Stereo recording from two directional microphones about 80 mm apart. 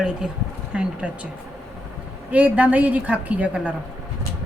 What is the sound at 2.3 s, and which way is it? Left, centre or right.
A woman's voice, centre.